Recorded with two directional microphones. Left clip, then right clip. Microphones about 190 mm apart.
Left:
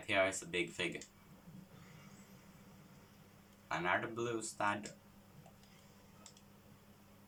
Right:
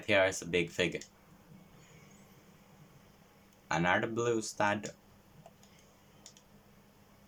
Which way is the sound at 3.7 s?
45° right (ahead or behind).